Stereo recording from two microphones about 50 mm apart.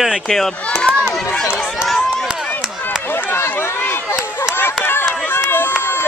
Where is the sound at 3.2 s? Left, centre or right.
Left.